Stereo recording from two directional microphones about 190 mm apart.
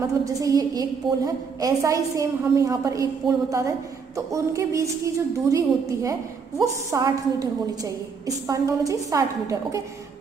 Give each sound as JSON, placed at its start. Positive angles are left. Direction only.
{"t": 0.0, "sound": "a woman's voice", "side_deg": -20}
{"t": 6.6, "sound": "a woman's voice", "side_deg": -20}